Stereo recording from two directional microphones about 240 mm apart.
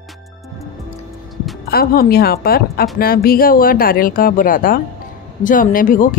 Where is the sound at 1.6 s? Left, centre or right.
Left.